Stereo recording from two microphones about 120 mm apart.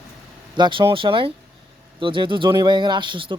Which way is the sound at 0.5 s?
40° right (ahead or behind).